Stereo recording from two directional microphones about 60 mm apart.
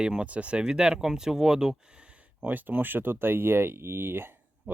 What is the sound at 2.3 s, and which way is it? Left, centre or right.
Speech, right.